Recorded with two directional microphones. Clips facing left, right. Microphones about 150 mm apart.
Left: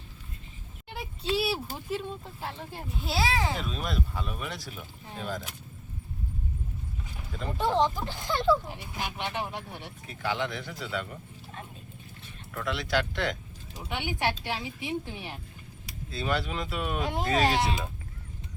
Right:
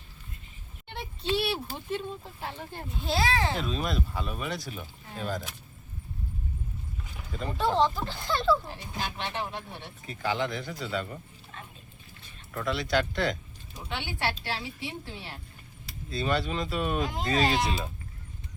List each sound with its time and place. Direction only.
0.9 s speech: 5° left (ahead or behind)
7.3 s speech: centre (ahead or behind)
7.8 s speech: 15° left (ahead or behind)
10.1 s speech: centre (ahead or behind)
12.5 s speech: centre (ahead or behind)
13.9 s speech: 15° left (ahead or behind)
16.0 s speech: centre (ahead or behind)